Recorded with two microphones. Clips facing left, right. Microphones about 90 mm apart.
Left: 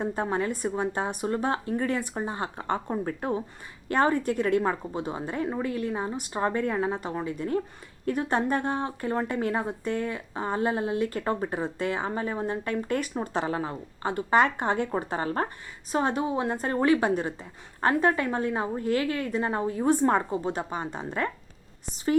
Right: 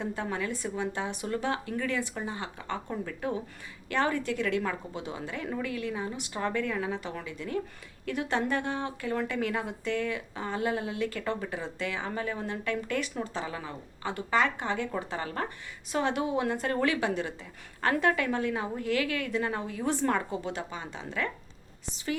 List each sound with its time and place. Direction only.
0.0 s a woman's voice: 40° left (ahead or behind)
12.1 s speech: 35° left (ahead or behind)
13.2 s speech: 60° left (ahead or behind)
13.5 s a woman's voice: 40° left (ahead or behind)